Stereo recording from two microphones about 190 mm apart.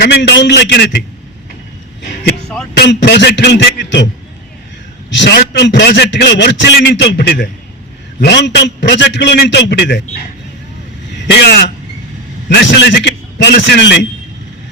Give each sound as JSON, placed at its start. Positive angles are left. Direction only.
{"t": 0.0, "sound": "a man's voice", "side_deg": 60}
{"t": 2.7, "sound": "a man's voice", "side_deg": 65}
{"t": 5.1, "sound": "a man's voice", "side_deg": 65}
{"t": 11.3, "sound": "a man's voice", "side_deg": 60}